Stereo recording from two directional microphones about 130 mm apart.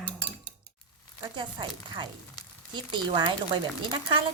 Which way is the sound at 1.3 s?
35° right (ahead or behind).